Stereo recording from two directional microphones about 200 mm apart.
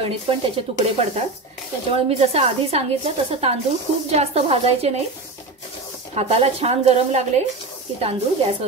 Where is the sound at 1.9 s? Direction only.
30° right (ahead or behind).